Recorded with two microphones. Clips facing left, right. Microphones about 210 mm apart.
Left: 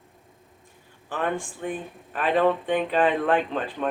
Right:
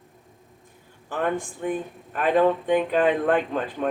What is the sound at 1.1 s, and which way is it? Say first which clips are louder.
Speech: right 2 dB; 45° right (ahead or behind).